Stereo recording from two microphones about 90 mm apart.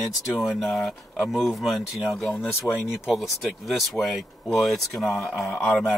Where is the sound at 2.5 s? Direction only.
25° left (ahead or behind).